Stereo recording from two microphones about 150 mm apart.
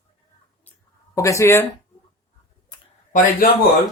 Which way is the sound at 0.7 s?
10° left (ahead or behind).